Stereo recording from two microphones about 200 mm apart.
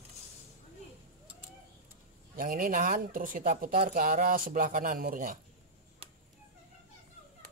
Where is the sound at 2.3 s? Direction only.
45° right (ahead or behind).